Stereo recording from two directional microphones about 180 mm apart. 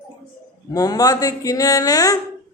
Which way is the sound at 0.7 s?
20° left (ahead or behind).